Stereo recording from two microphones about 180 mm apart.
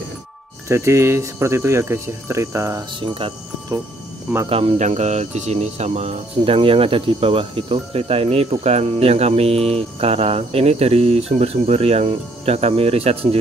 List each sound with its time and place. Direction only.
0.7 s speech: 15° right (ahead or behind)
3.2 s speech: 30° right (ahead or behind)